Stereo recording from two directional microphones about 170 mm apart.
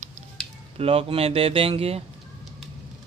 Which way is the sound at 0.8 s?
35° right (ahead or behind).